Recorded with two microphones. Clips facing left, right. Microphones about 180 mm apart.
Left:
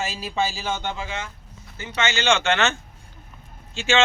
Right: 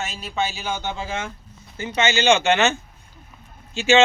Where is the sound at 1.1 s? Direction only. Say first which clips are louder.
Right 4 dB; 50° right (ahead or behind).